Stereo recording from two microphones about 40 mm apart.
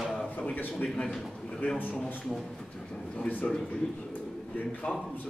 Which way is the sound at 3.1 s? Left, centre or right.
Left.